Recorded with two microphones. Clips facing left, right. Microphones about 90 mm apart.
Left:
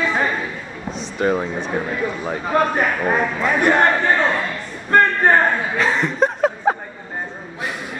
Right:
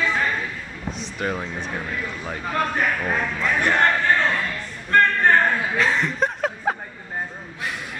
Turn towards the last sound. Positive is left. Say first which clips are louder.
# left 6 dB
turn(degrees=0)  # may be behind; listen again after turning